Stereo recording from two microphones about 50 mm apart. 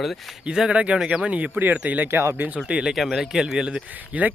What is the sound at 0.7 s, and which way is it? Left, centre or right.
Speech, right.